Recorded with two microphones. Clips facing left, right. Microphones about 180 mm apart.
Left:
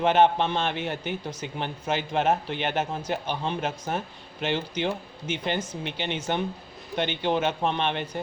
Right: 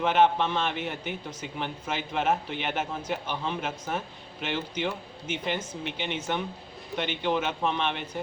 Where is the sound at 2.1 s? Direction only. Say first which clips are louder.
Left 2 dB; 35° left (ahead or behind).